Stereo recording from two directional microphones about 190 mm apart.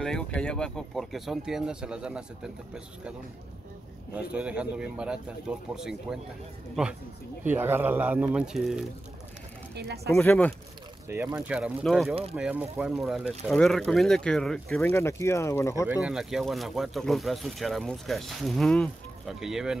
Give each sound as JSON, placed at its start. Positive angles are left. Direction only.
{"t": 0.0, "sound": "speech", "side_deg": 5}
{"t": 9.8, "sound": "speech", "side_deg": -60}
{"t": 10.1, "sound": "speech", "side_deg": 5}
{"t": 11.1, "sound": "speech", "side_deg": -10}
{"t": 16.0, "sound": "speech", "side_deg": 0}